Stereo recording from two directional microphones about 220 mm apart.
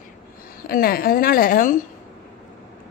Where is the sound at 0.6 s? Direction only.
40° left (ahead or behind).